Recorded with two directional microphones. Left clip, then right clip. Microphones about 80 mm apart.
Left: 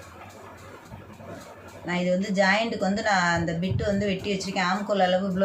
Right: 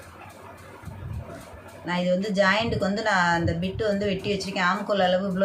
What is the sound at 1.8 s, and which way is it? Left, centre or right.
A woman's voice, right.